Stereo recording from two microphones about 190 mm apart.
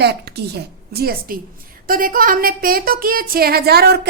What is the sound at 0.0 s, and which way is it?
A woman's voice, 60° right (ahead or behind).